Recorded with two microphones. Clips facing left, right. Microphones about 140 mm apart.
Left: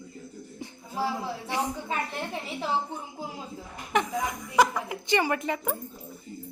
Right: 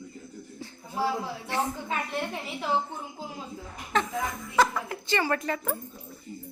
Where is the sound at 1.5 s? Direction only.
15° left (ahead or behind).